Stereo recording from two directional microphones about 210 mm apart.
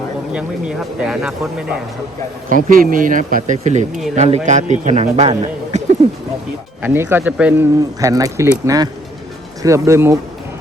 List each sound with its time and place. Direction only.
0.3 s speech: 5° right (ahead or behind)
2.6 s speech: 40° right (ahead or behind)
6.0 s a sound: 30° right (ahead or behind)
6.8 s speech: 10° right (ahead or behind)